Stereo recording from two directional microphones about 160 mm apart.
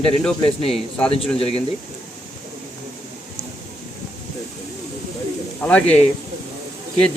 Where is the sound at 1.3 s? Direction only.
35° left (ahead or behind).